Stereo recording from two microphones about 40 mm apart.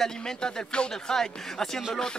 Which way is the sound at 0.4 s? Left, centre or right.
Centre.